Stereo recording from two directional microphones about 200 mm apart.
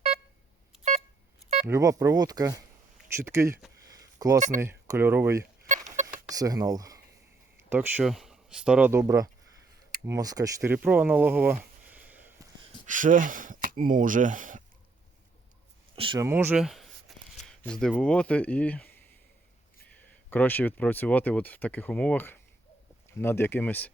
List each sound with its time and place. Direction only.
1.6 s speech: 15° right (ahead or behind)
3.8 s a sound: 20° right (ahead or behind)
4.4 s speech: 40° right (ahead or behind)
4.6 s speech: 10° right (ahead or behind)
5.6 s chicken: 40° right (ahead or behind)
6.2 s speech: 20° right (ahead or behind)
12.8 s speech: 40° right (ahead or behind)
16.0 s speech: 25° right (ahead or behind)
16.2 s speech: 10° right (ahead or behind); by 18.9 s 10° left (ahead or behind)
20.3 s speech: 10° left (ahead or behind)